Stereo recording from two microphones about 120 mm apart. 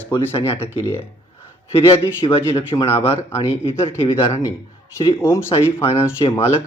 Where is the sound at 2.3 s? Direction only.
55° left (ahead or behind).